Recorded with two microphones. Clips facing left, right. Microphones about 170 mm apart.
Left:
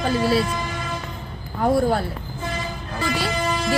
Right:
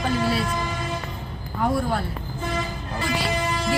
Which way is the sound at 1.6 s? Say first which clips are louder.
Left 4 dB; 35° left (ahead or behind).